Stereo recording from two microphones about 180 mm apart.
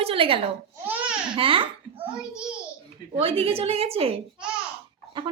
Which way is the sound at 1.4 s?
30° right (ahead or behind).